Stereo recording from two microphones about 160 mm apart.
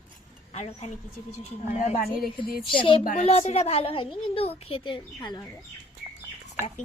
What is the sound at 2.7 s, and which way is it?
A woman's voice, 30° left (ahead or behind).